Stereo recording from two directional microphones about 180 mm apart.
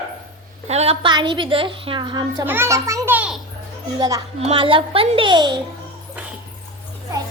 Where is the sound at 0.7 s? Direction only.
35° right (ahead or behind).